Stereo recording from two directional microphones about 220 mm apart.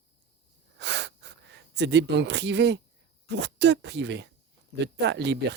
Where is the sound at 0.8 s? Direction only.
50° right (ahead or behind).